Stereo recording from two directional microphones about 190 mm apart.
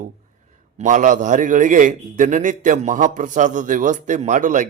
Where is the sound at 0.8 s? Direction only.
40° right (ahead or behind).